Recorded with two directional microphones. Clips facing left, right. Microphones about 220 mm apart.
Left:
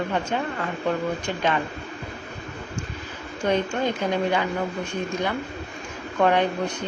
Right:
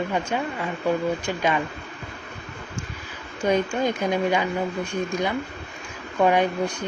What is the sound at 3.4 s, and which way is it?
Speech, 10° right (ahead or behind).